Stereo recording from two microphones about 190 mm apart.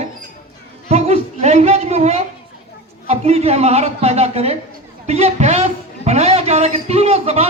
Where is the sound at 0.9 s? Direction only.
35° right (ahead or behind).